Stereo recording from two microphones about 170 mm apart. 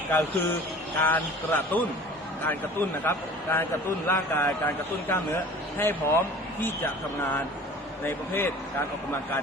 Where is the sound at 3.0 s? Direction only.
15° left (ahead or behind).